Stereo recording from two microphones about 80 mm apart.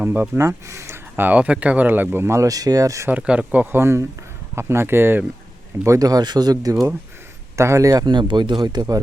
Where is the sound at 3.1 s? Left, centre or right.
Centre.